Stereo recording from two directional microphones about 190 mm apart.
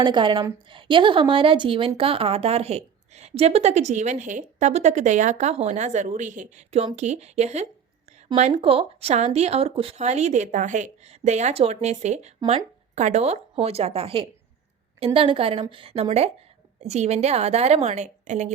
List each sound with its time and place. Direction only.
0.0 s a woman's voice: 25° right (ahead or behind)